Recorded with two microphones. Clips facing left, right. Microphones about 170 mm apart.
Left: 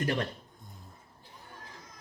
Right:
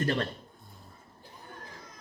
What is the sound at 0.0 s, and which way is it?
Speech, 15° left (ahead or behind).